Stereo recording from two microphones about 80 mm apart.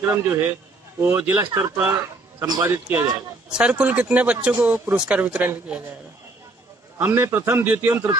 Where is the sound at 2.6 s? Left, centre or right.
Right.